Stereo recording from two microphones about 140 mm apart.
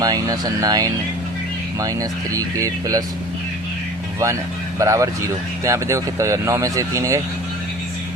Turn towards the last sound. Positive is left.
turn(degrees=-20)  # may be behind; listen again after turning